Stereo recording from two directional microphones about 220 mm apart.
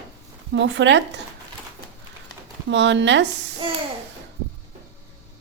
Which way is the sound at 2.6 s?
55° right (ahead or behind).